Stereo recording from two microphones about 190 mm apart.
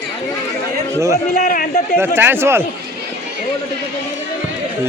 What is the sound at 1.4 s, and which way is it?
Speech, 50° left (ahead or behind).